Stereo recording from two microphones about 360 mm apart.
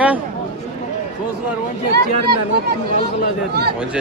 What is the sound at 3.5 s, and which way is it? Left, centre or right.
Speech, right.